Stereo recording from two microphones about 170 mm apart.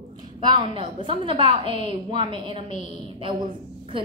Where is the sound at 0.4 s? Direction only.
25° right (ahead or behind).